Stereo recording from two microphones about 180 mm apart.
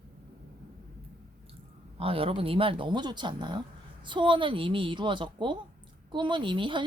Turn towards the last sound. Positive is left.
turn(degrees=-25)  # may be behind; listen again after turning